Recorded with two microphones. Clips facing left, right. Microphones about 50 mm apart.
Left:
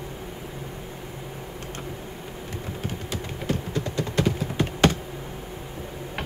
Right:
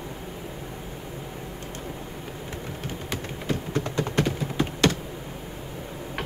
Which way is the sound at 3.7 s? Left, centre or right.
Right.